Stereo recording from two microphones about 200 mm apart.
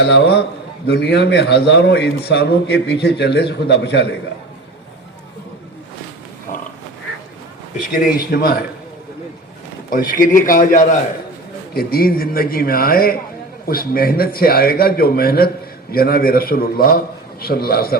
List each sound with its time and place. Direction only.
0.0 s a man's voice: 60° left (ahead or behind)
6.5 s pig: 45° left (ahead or behind)
7.9 s a man's voice: 50° left (ahead or behind)
9.9 s a man's voice: 45° left (ahead or behind)